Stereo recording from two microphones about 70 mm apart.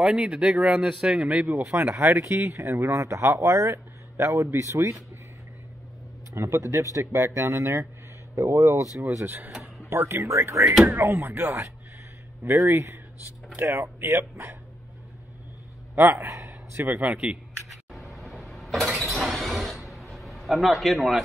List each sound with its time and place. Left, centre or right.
0.0 s a man's voice: centre
1.8 s speech: right
2.2 s speech: right
6.3 s speech: right
9.2 s speech: right
10.6 s a man's voice: centre
10.9 s speech: right
16.1 s a man's voice: right
16.9 s a man's voice: centre
17.9 s a sound: centre